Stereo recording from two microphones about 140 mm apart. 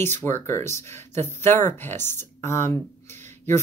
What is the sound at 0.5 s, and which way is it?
Speech, 20° left (ahead or behind).